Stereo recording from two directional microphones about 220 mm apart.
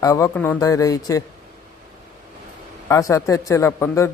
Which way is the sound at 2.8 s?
15° left (ahead or behind).